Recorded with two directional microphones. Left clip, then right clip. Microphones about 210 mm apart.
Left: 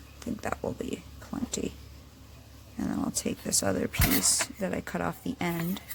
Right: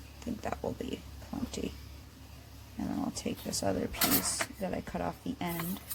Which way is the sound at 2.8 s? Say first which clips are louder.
Left 4 dB; 25° left (ahead or behind).